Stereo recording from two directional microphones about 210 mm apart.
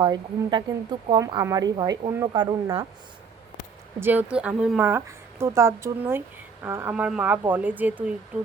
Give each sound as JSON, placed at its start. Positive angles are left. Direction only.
{"t": 0.0, "sound": "a woman's voice", "side_deg": -20}
{"t": 4.0, "sound": "a woman's voice", "side_deg": -10}